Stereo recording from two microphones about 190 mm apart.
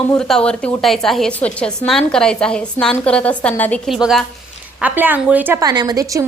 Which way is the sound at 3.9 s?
Centre (ahead or behind).